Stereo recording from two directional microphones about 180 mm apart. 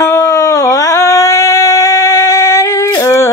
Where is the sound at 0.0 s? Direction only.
15° left (ahead or behind).